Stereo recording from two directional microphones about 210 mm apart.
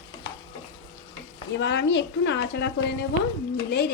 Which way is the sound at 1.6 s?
60° left (ahead or behind).